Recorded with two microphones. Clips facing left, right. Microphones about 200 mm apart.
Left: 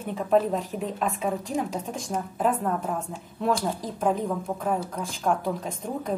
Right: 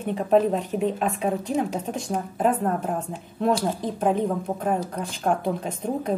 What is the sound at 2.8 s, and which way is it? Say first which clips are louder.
A woman's voice: right 2 dB; 20° right (ahead or behind).